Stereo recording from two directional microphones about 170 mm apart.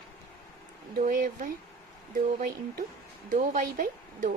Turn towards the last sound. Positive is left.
turn(degrees=-50)  # may be behind; listen again after turning